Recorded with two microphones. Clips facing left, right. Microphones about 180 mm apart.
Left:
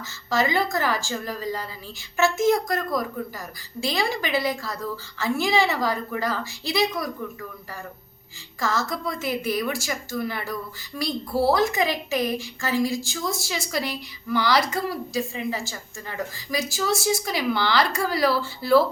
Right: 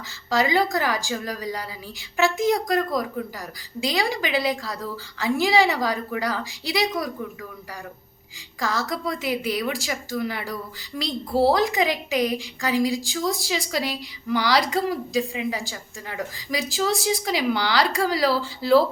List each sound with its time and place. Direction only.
0.3 s a woman's voice: 15° right (ahead or behind)
8.6 s a woman's voice: 15° right (ahead or behind)